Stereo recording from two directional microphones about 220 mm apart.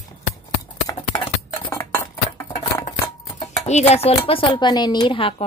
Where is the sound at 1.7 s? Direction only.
10° left (ahead or behind).